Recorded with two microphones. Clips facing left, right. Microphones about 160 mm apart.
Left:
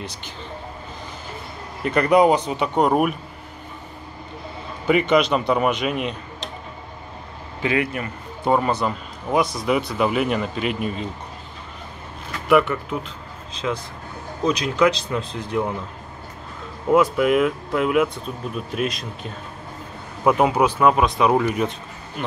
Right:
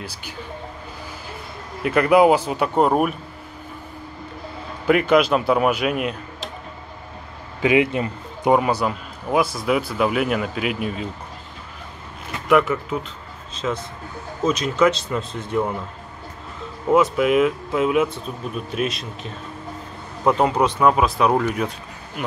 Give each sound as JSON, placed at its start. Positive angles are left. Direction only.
{"t": 1.8, "sound": "speech", "side_deg": -5}
{"t": 4.8, "sound": "speech", "side_deg": 0}
{"t": 7.6, "sound": "speech", "side_deg": -20}
{"t": 8.5, "sound": "a man's voice", "side_deg": -10}
{"t": 12.4, "sound": "speech", "side_deg": 0}
{"t": 16.9, "sound": "speech", "side_deg": 0}